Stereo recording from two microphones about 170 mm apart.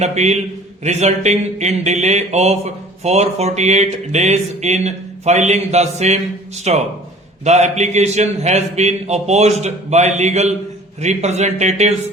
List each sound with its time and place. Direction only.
0.0 s speech: 40° right (ahead or behind)